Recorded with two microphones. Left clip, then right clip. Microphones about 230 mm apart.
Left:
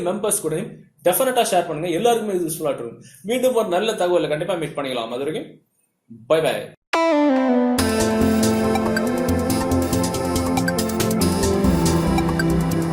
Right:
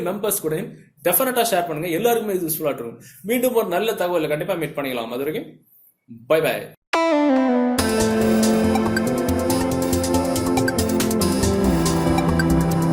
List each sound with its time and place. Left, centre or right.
0.0 s a man's voice: right
6.9 s music: centre